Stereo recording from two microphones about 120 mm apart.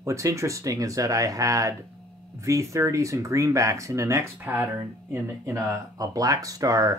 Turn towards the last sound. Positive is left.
turn(degrees=-30)  # may be behind; listen again after turning